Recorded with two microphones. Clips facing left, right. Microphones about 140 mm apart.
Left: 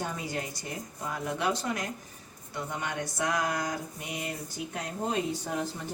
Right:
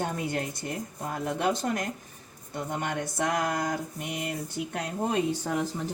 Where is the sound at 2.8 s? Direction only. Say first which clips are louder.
Right 2 dB; 55° right (ahead or behind).